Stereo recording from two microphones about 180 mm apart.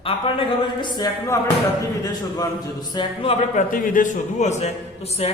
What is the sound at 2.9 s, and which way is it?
Speech, 25° left (ahead or behind).